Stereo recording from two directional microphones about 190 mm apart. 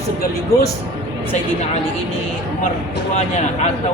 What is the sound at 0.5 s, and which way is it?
Speech, 15° left (ahead or behind).